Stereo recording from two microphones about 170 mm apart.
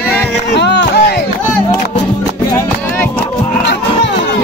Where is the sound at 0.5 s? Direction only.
90° left.